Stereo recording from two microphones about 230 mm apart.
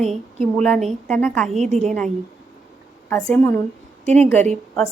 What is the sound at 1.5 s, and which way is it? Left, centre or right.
Speech, right.